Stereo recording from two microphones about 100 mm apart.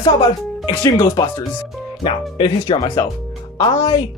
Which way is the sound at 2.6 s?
50° left (ahead or behind).